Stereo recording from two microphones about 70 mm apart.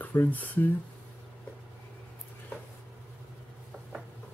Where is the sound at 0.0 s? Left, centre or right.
Left.